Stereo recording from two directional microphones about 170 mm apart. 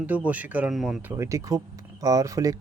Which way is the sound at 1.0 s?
15° right (ahead or behind).